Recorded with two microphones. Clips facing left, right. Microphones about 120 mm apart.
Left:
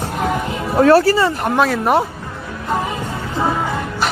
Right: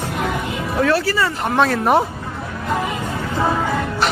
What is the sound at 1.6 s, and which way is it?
Speech, centre (ahead or behind).